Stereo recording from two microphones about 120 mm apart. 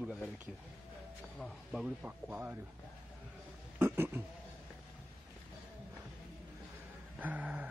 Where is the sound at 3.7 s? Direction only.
20° right (ahead or behind).